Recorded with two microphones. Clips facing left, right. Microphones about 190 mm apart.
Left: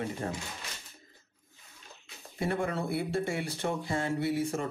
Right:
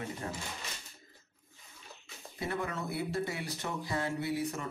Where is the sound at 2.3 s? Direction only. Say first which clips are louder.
Left 5 dB; 30° left (ahead or behind).